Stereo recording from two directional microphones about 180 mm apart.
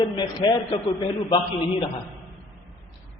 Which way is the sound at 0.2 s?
25° left (ahead or behind).